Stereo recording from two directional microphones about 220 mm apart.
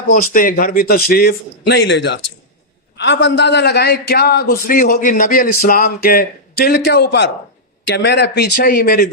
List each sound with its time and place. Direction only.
0.1 s a man's voice: 40° left (ahead or behind)